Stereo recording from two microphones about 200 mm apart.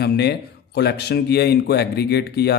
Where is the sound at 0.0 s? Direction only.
55° left (ahead or behind).